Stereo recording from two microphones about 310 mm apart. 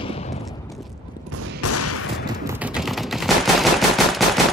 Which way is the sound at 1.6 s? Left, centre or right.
Left.